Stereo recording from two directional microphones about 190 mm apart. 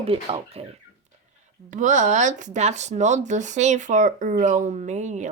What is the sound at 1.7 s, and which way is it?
Speech, 40° right (ahead or behind).